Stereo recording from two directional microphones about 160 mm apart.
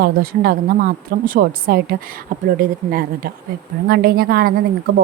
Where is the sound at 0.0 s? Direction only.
70° right (ahead or behind).